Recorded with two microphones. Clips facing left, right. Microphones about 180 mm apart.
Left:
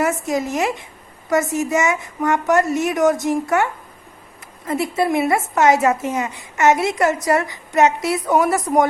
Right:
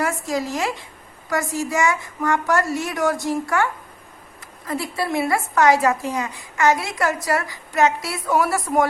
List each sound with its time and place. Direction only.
0.0 s a woman's voice: 20° left (ahead or behind)